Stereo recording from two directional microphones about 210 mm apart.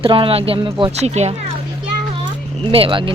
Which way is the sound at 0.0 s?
25° right (ahead or behind).